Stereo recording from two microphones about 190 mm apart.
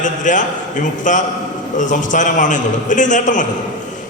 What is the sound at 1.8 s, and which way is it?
A man's voice, 40° left (ahead or behind).